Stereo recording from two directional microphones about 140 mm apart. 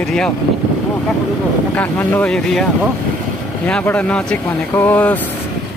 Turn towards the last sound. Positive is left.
turn(degrees=15)  # may be behind; listen again after turning